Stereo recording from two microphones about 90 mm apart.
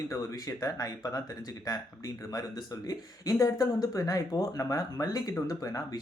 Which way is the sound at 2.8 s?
40° left (ahead or behind).